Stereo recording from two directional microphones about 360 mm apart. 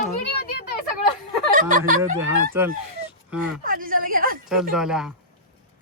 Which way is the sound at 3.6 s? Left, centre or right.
Right.